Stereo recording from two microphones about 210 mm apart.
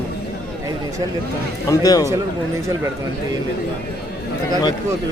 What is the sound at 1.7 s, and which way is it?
Speech, 15° left (ahead or behind).